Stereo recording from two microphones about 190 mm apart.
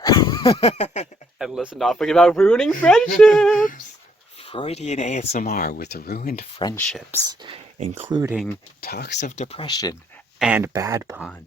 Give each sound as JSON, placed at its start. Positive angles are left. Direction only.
{"t": 0.0, "sound": "a sound", "side_deg": 20}
{"t": 0.6, "sound": "speech", "side_deg": 35}
{"t": 1.4, "sound": "speech", "side_deg": 0}
{"t": 4.4, "sound": "speech", "side_deg": 30}
{"t": 5.5, "sound": "speech", "side_deg": 55}
{"t": 6.5, "sound": "speech", "side_deg": 25}
{"t": 6.7, "sound": "speech", "side_deg": 5}
{"t": 7.1, "sound": "speech", "side_deg": -25}
{"t": 8.8, "sound": "speech", "side_deg": 55}
{"t": 9.2, "sound": "speech", "side_deg": 40}
{"t": 10.3, "sound": "a sound", "side_deg": -5}
{"t": 10.6, "sound": "speech", "side_deg": -15}